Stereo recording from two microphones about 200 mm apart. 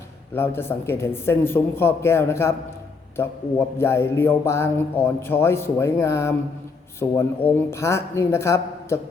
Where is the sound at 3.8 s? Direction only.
15° left (ahead or behind).